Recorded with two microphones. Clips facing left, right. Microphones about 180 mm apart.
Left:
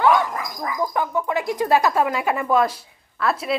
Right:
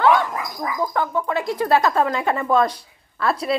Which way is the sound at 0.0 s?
15° left (ahead or behind).